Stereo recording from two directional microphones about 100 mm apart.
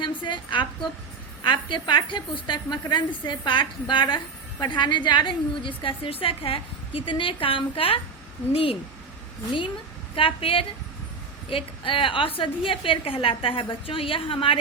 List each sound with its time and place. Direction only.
0.0 s a woman's voice: 55° left (ahead or behind); by 8.8 s 70° left (ahead or behind)
10.2 s a woman's voice: 65° left (ahead or behind)